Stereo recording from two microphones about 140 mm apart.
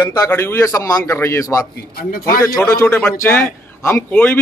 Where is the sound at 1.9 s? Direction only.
90° left.